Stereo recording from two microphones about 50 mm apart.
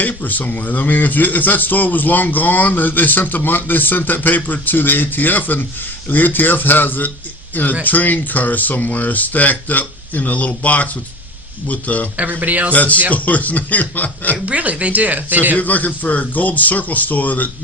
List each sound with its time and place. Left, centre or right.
0.0 s speech: left
12.1 s speech: right
12.7 s speech: left
14.4 s speech: right
15.5 s speech: left